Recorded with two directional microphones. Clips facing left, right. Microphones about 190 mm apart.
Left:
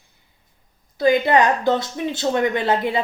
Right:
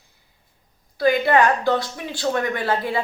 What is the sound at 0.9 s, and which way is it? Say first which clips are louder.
Speech: left 1 dB; 20° left (ahead or behind).